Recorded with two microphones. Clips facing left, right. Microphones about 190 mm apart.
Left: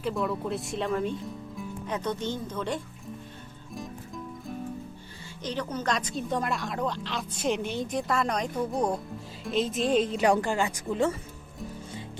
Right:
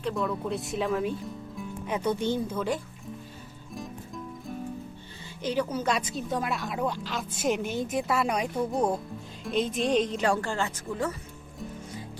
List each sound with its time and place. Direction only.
0.0 s speech: centre (ahead or behind)
3.8 s music: centre (ahead or behind)
5.4 s speech: 10° right (ahead or behind); by 10.2 s 5° left (ahead or behind)
10.2 s speech: 15° left (ahead or behind)